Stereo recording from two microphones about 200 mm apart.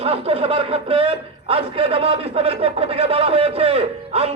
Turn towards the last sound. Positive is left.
turn(degrees=-30)  # may be behind; listen again after turning